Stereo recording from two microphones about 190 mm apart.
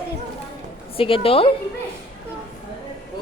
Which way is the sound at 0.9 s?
30° left (ahead or behind).